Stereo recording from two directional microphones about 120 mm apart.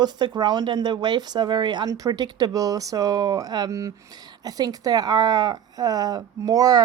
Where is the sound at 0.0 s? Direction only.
35° right (ahead or behind).